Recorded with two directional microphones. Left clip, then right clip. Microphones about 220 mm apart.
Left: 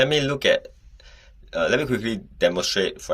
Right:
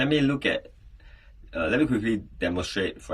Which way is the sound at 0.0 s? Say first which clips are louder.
Left 4 dB; 45° left (ahead or behind).